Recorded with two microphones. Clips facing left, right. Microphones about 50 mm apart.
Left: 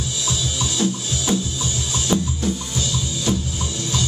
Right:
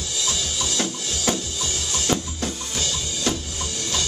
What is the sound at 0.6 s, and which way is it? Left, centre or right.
Music, right.